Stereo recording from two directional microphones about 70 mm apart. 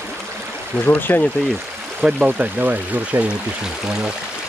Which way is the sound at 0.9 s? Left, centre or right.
Left.